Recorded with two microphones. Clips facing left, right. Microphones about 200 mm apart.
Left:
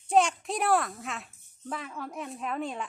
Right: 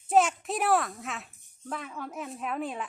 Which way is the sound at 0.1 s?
5° right (ahead or behind).